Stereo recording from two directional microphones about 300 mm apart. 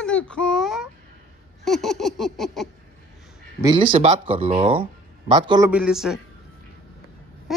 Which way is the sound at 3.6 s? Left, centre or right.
Centre.